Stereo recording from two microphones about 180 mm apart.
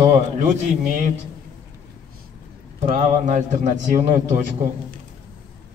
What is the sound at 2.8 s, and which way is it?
A man's voice, 40° right (ahead or behind).